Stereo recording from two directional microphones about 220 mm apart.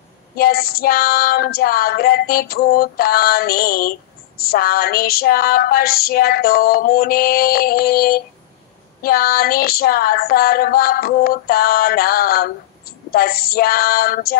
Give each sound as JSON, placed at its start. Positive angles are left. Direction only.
{"t": 0.4, "sound": "female singing", "side_deg": 45}